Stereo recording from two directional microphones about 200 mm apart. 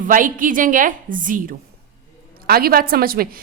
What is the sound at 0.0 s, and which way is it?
A woman's voice, 40° right (ahead or behind).